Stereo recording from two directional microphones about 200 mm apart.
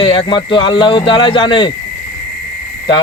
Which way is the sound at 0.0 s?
25° left (ahead or behind).